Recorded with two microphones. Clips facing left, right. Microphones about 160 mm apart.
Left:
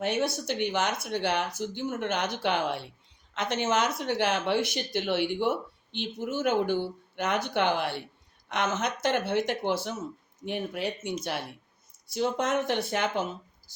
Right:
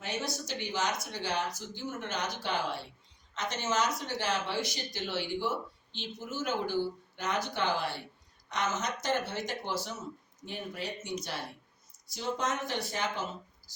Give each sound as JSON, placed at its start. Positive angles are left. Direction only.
{"t": 0.0, "sound": "speech", "side_deg": 60}
{"t": 12.1, "sound": "speech", "side_deg": 60}